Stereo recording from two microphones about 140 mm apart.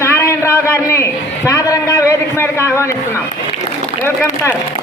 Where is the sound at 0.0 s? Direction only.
20° left (ahead or behind).